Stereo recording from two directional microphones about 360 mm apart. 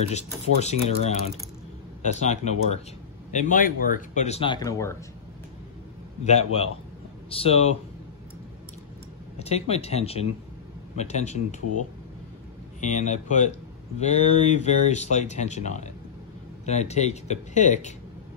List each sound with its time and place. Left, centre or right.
0.1 s speech: centre
6.2 s speech: centre
9.4 s speech: centre
12.8 s speech: centre